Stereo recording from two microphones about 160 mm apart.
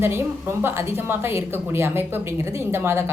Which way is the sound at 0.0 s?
15° right (ahead or behind).